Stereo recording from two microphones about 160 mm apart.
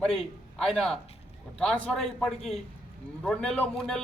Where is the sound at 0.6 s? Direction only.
Centre (ahead or behind).